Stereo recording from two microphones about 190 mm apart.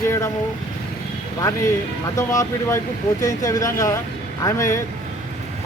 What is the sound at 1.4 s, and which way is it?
Speech, 15° left (ahead or behind).